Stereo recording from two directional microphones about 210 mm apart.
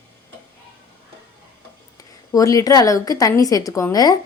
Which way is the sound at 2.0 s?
15° left (ahead or behind).